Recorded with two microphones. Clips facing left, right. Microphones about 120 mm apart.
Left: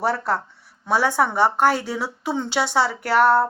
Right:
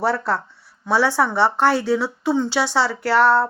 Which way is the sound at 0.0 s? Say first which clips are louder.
Right 1 dB; 45° left (ahead or behind).